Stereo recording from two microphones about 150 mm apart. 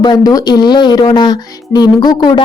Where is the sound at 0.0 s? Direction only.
25° left (ahead or behind).